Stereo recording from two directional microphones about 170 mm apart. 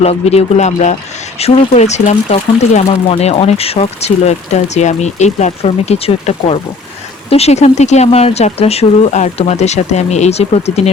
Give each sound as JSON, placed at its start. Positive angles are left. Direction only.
{"t": 0.0, "sound": "speech", "side_deg": 40}